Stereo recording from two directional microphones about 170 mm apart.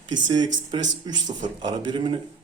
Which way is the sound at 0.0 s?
25° right (ahead or behind).